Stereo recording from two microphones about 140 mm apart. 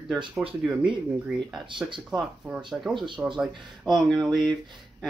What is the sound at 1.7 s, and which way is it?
Speech, 35° right (ahead or behind).